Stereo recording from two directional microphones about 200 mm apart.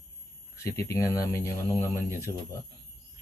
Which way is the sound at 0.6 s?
15° left (ahead or behind).